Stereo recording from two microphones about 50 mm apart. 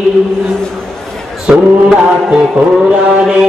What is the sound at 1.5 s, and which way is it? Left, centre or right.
Mantra, centre.